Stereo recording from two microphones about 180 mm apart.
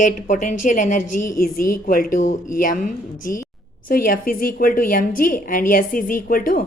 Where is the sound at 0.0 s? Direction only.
45° left (ahead or behind).